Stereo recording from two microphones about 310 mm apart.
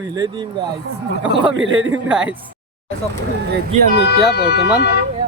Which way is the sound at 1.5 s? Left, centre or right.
Right.